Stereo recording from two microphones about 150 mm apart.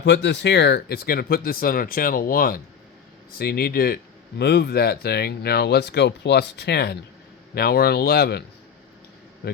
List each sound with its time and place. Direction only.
0.5 s speech: 90° left; by 2.6 s 70° left (ahead or behind)
3.3 s a man's voice: 90° left